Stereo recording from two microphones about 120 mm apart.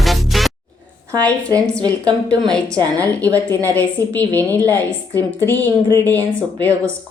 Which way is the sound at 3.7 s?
15° left (ahead or behind).